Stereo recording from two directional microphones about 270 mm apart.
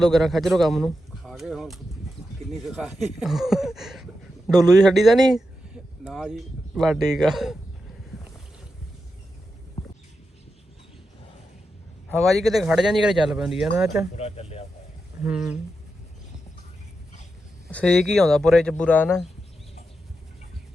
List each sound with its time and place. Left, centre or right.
0.0 s speech: centre
9.8 s a sound: left
12.0 s speech: centre
14.2 s speech: left
15.2 s speech: centre
17.7 s speech: centre